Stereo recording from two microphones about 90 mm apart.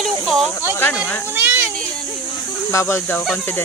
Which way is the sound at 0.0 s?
Centre (ahead or behind).